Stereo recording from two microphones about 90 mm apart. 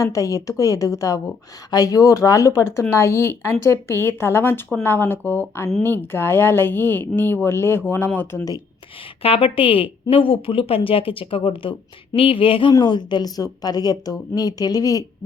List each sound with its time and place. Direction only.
0.0 s a woman's voice: 40° left (ahead or behind)
9.2 s speech: 90° left
12.1 s a sound: 85° left
12.7 s speech: 55° left (ahead or behind)